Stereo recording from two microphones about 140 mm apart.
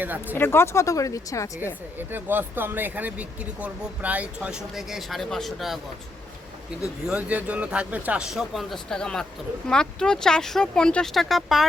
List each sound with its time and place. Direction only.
0.0 s speech: 15° right (ahead or behind)
0.3 s speech: 15° left (ahead or behind)
2.0 s speech: 15° right (ahead or behind)
7.1 s speech: 10° right (ahead or behind)